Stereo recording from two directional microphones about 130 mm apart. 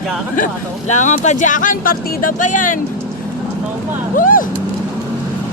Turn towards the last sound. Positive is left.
turn(degrees=90)